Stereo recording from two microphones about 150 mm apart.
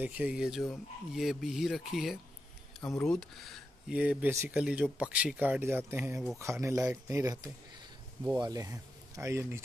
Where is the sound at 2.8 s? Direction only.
20° left (ahead or behind).